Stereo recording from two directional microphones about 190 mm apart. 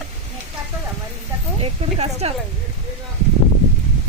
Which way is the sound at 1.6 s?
30° right (ahead or behind).